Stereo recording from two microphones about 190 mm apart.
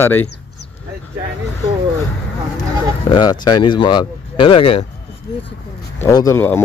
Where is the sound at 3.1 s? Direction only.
20° left (ahead or behind).